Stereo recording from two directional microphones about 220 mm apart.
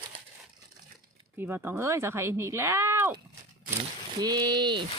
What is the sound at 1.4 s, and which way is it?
Speech, 10° right (ahead or behind).